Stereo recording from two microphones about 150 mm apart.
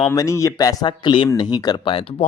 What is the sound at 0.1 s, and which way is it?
Speech, 20° left (ahead or behind).